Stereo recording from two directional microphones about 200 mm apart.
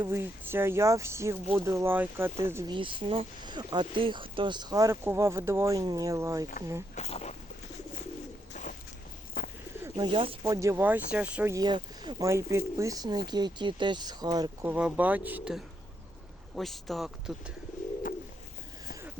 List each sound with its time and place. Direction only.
0.0 s speech: 10° right (ahead or behind)
3.0 s speech: 25° right (ahead or behind)
6.9 s speech: 35° left (ahead or behind)
8.5 s a sound: 40° left (ahead or behind)
9.8 s speech: 25° right (ahead or behind); by 17.5 s centre (ahead or behind)